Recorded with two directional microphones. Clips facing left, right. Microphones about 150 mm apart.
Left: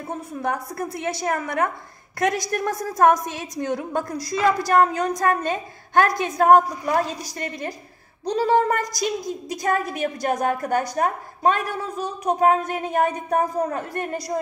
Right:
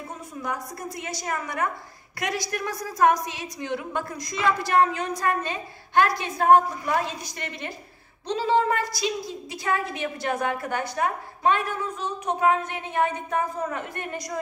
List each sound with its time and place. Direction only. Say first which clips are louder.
0.1 s a woman's voice: left 7 dB; 60° left (ahead or behind); by 14.4 s 35° left (ahead or behind)